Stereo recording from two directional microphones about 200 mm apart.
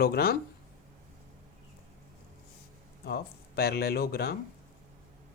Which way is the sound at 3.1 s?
50° left (ahead or behind).